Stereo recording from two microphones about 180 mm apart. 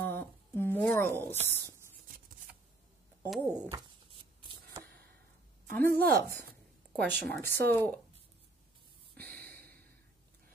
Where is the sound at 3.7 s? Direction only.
25° right (ahead or behind).